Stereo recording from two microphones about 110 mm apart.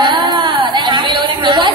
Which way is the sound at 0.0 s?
45° right (ahead or behind).